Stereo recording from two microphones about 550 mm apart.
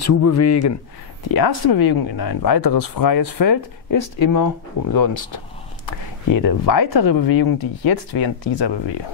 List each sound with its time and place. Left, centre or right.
0.1 s speech: left
1.3 s speech: left
6.2 s speech: left